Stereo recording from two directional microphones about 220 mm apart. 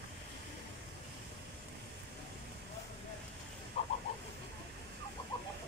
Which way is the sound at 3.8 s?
30° left (ahead or behind).